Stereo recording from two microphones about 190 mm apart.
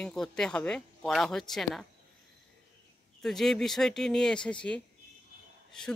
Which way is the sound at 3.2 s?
Centre (ahead or behind).